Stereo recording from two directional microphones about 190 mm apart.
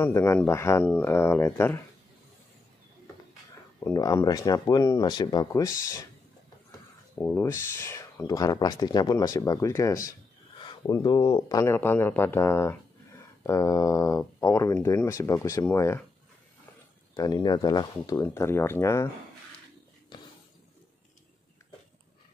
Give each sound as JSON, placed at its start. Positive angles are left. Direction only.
{"t": 0.0, "sound": "speech", "side_deg": 15}
{"t": 3.8, "sound": "speech", "side_deg": 20}
{"t": 7.2, "sound": "speech", "side_deg": 10}
{"t": 17.1, "sound": "speech", "side_deg": 20}